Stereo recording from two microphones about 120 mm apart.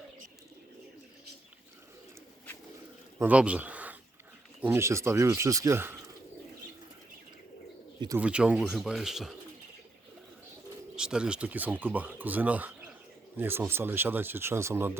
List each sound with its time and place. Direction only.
3.2 s speech: 10° right (ahead or behind)
8.2 s speech: 10° right (ahead or behind)
10.9 s speech: 5° right (ahead or behind)